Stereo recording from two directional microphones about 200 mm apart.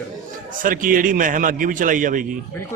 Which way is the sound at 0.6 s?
45° right (ahead or behind).